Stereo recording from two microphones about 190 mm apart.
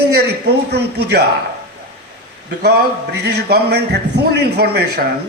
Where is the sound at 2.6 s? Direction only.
60° right (ahead or behind).